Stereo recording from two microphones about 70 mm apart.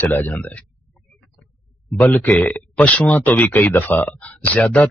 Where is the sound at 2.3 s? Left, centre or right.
Centre.